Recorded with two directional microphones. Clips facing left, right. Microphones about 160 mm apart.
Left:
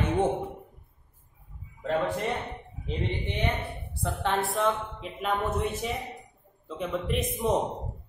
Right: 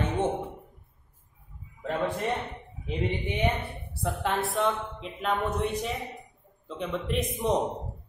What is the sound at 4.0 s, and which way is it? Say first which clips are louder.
A woman's voice: even; centre (ahead or behind).